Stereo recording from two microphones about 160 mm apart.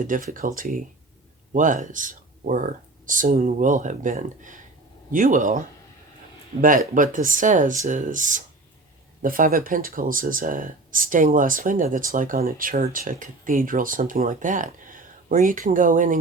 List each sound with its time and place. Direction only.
0.0 s speech: 55° right (ahead or behind)